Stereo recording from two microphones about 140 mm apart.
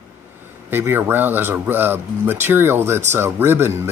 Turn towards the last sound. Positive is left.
turn(degrees=-15)  # may be behind; listen again after turning